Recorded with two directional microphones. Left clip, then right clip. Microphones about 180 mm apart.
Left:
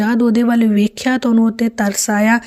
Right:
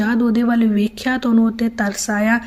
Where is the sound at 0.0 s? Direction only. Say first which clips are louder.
Left 3 dB; 50° left (ahead or behind).